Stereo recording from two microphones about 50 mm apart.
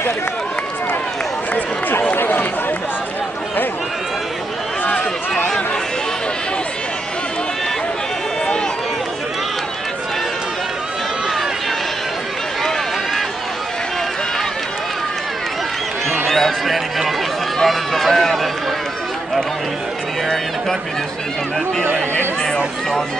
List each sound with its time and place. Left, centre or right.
1.5 s run: left
16.3 s run: centre